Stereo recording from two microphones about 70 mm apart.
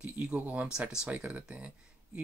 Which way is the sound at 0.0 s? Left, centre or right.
Centre.